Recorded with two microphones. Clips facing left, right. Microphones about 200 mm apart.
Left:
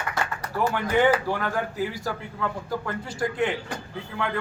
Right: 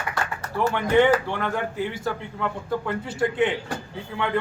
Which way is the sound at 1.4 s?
Centre (ahead or behind).